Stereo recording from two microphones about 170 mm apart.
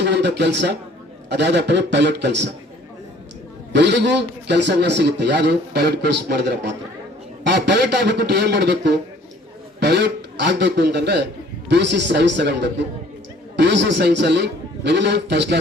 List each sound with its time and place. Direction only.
0.0 s a man's voice: 85° right
3.7 s a man's voice: 90° right